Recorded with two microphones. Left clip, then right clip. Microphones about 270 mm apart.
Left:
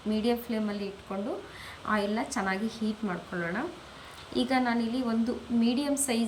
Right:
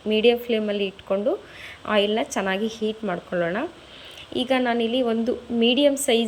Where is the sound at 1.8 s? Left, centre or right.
Centre.